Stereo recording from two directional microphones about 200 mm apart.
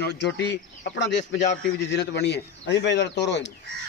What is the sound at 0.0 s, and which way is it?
Speech, 60° left (ahead or behind).